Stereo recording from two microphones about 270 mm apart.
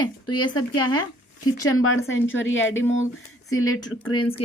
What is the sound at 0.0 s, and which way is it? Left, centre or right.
Speech, left.